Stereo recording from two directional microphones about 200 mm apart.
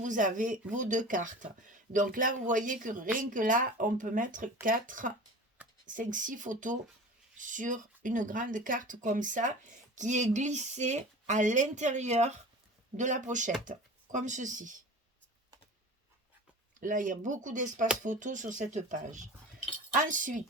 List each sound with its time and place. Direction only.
0.0 s speech: 40° right (ahead or behind)
16.8 s speech: 40° right (ahead or behind)